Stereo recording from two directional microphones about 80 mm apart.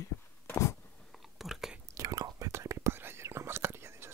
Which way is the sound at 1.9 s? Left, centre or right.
Right.